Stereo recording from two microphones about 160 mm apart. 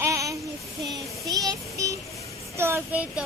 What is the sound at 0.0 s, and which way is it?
Child singing, 20° right (ahead or behind).